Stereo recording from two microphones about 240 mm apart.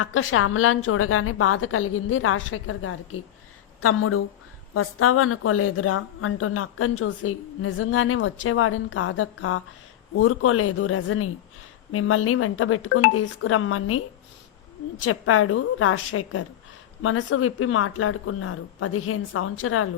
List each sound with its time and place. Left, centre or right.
0.0 s a woman's voice: left
15.0 s a woman's voice: left